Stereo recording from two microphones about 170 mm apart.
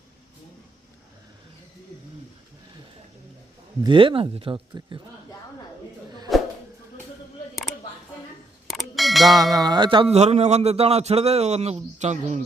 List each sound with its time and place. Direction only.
3.8 s speech: 30° right (ahead or behind)
8.7 s a sound: centre (ahead or behind)
9.4 s speech: 20° right (ahead or behind); by 12.4 s 45° right (ahead or behind)